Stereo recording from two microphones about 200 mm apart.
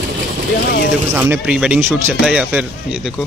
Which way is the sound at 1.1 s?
10° right (ahead or behind).